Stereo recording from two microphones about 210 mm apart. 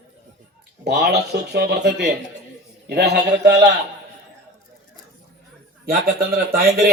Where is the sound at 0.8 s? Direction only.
50° right (ahead or behind).